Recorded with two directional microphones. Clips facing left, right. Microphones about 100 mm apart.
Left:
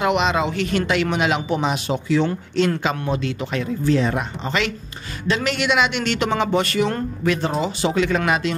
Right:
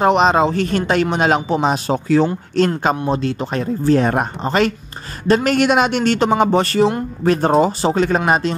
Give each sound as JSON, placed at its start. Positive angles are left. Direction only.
{"t": 0.0, "sound": "speech", "side_deg": -40}
{"t": 7.2, "sound": "speech", "side_deg": -45}